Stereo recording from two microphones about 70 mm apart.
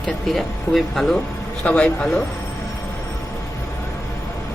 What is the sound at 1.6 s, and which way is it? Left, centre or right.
Speech, centre.